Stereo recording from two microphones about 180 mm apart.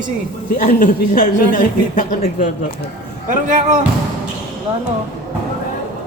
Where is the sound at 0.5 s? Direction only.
50° left (ahead or behind).